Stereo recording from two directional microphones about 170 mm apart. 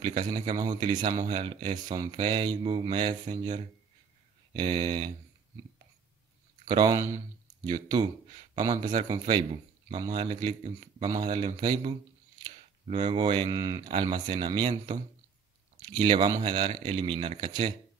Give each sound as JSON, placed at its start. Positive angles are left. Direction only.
{"t": 0.0, "sound": "speech", "side_deg": -35}
{"t": 4.6, "sound": "speech", "side_deg": -25}
{"t": 6.7, "sound": "speech", "side_deg": -25}
{"t": 15.9, "sound": "speech", "side_deg": -30}